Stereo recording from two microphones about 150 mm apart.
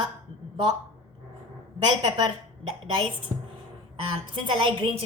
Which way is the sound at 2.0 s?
35° right (ahead or behind).